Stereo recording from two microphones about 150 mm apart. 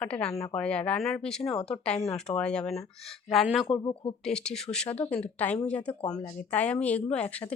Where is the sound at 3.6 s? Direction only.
30° left (ahead or behind).